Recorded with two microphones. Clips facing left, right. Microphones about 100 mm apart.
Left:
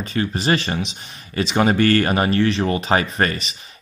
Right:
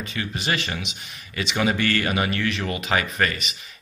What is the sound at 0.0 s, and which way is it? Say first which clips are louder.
Speech: left 7 dB; 35° left (ahead or behind).